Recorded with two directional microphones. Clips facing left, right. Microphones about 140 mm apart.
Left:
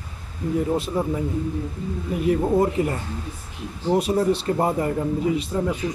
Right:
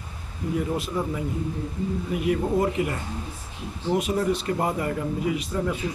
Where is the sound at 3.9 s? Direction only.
30° left (ahead or behind).